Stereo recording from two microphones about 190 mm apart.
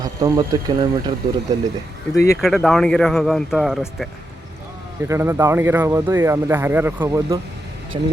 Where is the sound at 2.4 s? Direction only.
Centre (ahead or behind).